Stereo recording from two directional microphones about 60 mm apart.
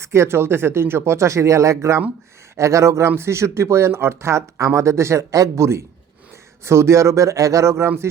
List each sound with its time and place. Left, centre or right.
0.0 s speech: right